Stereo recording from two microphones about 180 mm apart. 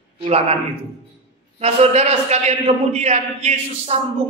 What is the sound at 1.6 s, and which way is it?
A man's voice, 35° right (ahead or behind).